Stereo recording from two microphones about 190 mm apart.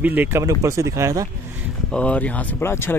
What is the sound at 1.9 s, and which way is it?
Speech, 5° left (ahead or behind).